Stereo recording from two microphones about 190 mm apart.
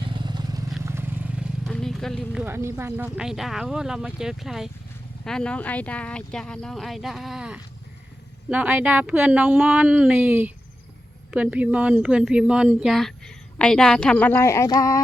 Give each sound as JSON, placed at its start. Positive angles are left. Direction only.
{"t": 0.0, "sound": "vehicle", "side_deg": -25}
{"t": 1.7, "sound": "a sound", "side_deg": 0}
{"t": 2.5, "sound": "a woman's voice", "side_deg": -15}